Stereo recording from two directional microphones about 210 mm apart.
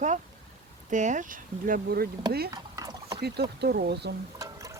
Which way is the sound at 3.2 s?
50° right (ahead or behind).